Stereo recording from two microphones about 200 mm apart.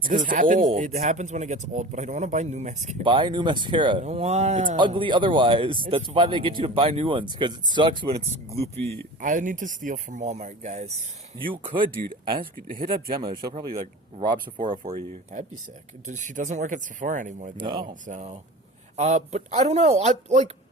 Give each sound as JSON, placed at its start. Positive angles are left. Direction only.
{"t": 0.3, "sound": "speech", "side_deg": -40}
{"t": 3.0, "sound": "speech", "side_deg": -25}
{"t": 4.9, "sound": "speech", "side_deg": -25}
{"t": 16.0, "sound": "speech", "side_deg": -40}